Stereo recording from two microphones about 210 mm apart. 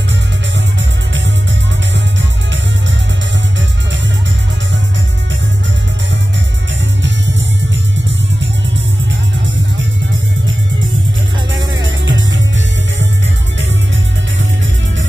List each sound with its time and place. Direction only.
11.5 s music: 65° right (ahead or behind)